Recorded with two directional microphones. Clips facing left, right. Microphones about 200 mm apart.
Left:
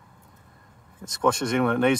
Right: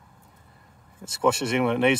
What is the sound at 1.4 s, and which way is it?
Speech, 10° right (ahead or behind).